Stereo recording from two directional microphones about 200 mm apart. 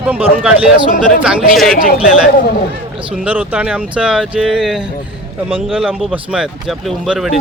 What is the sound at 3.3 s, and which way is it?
A man's voice, 10° right (ahead or behind).